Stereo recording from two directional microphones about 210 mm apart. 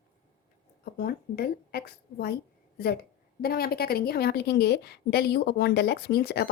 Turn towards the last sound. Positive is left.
turn(degrees=50)  # may be behind; listen again after turning